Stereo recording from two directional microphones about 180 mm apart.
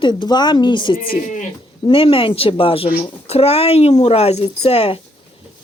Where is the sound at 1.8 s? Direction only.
30° left (ahead or behind).